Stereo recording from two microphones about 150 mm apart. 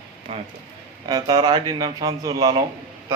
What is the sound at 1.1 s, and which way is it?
A man's voice, 25° right (ahead or behind).